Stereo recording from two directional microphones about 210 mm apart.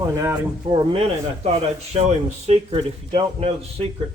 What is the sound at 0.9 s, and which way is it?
Speech, 25° right (ahead or behind).